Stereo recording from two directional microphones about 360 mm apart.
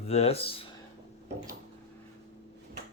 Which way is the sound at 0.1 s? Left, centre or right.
Centre.